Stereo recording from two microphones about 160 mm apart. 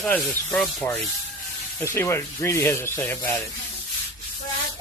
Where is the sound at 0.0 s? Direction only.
5° left (ahead or behind).